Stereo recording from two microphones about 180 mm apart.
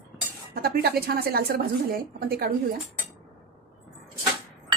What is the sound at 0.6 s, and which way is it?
A woman's voice, 60° right (ahead or behind).